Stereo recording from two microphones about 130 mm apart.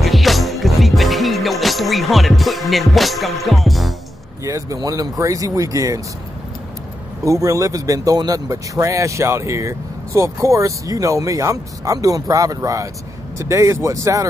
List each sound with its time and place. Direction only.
0.0 s music: centre (ahead or behind)
4.5 s speech: 25° right (ahead or behind)
7.2 s speech: 25° right (ahead or behind)